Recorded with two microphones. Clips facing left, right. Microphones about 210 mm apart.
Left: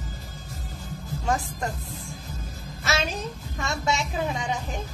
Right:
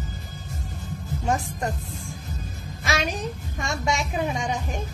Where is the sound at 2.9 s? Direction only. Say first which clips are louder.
Right 1 dB; 15° right (ahead or behind).